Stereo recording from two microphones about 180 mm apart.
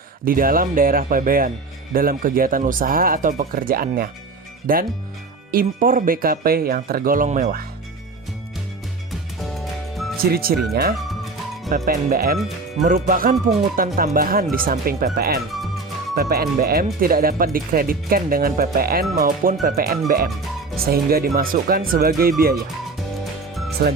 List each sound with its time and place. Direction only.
0.3 s speech: 50° right (ahead or behind)
10.5 s speech: 55° right (ahead or behind)
11.9 s speech: 55° right (ahead or behind)
12.7 s speech: 45° right (ahead or behind)
15.5 s music: centre (ahead or behind)
16.1 s speech: 60° right (ahead or behind)
23.8 s speech: 60° right (ahead or behind)